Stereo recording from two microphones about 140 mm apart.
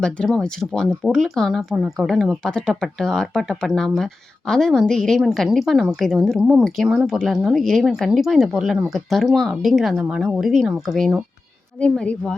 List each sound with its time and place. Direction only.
0.0 s speech: 5° left (ahead or behind)